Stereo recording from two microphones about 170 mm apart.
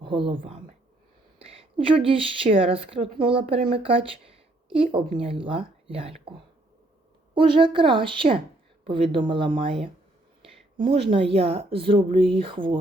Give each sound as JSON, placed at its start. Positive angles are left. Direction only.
{"t": 0.0, "sound": "a woman's voice", "side_deg": -30}
{"t": 7.3, "sound": "speech", "side_deg": -30}